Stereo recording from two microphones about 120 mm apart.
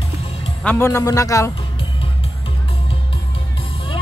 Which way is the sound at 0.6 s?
20° left (ahead or behind).